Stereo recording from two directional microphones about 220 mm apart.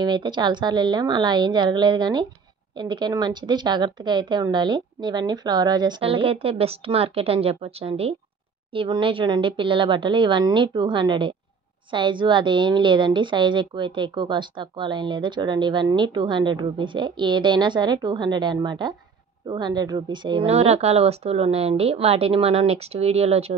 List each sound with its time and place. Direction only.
0.0 s a woman's voice: 20° right (ahead or behind)